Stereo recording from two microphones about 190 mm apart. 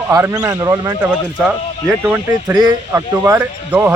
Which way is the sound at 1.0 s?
5° right (ahead or behind).